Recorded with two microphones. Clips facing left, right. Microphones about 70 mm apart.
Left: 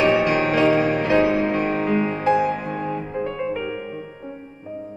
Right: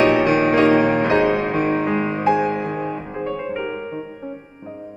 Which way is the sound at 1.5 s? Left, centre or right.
Centre.